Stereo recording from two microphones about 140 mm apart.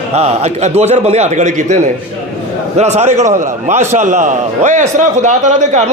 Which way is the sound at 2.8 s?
55° right (ahead or behind).